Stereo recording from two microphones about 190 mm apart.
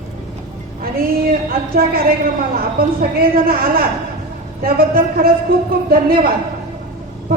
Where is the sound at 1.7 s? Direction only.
50° right (ahead or behind).